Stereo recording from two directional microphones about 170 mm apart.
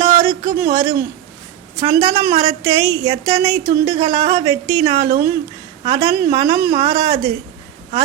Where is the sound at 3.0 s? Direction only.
35° right (ahead or behind).